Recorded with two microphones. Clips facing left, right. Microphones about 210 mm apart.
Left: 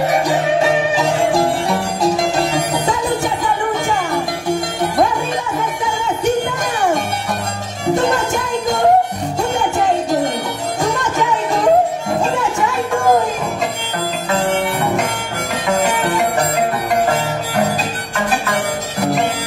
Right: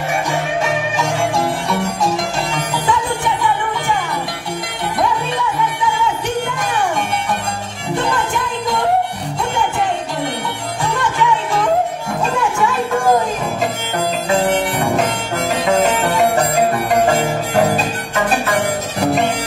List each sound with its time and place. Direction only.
0.3 s music: 35° left (ahead or behind)
10.8 s music: 40° left (ahead or behind)